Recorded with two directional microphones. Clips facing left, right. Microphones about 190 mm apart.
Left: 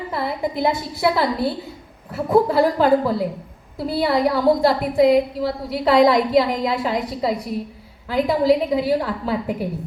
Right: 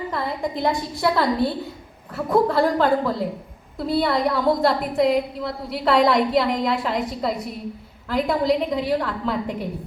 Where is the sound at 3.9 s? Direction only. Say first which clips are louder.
Left 2 dB; 5° left (ahead or behind).